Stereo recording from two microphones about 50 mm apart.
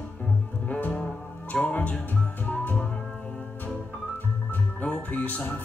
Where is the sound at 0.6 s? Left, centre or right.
Left.